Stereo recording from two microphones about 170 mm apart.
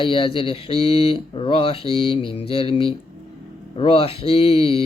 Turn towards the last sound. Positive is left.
turn(degrees=35)  # may be behind; listen again after turning